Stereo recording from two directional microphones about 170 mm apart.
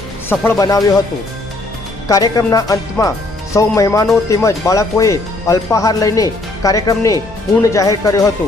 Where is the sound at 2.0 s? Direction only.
20° left (ahead or behind).